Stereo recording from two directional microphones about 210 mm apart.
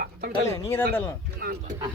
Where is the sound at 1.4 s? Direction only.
45° right (ahead or behind).